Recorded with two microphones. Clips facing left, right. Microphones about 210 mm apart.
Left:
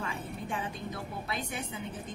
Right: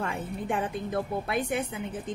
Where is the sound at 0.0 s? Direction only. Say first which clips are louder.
Right 5 dB; 55° right (ahead or behind).